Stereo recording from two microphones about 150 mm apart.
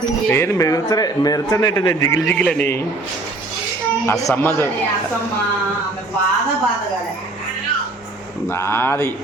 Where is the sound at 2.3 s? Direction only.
10° left (ahead or behind).